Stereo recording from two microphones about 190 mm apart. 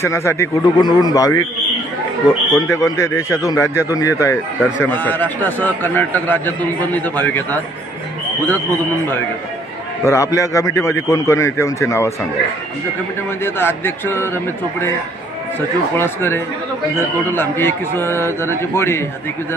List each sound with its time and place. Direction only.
0.0 s a man's voice: 15° left (ahead or behind)
8.5 s a man's voice: 10° left (ahead or behind)
13.4 s a man's voice: 10° left (ahead or behind)
16.0 s a man's voice: 10° left (ahead or behind)